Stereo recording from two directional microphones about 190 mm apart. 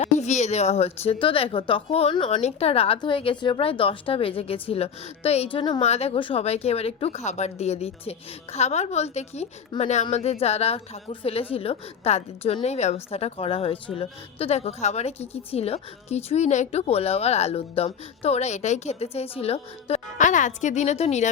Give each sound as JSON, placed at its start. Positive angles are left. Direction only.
{"t": 0.0, "sound": "a woman's voice", "side_deg": 40}